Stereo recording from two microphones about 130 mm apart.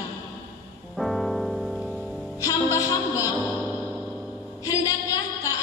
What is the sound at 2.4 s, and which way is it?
Music, 25° left (ahead or behind).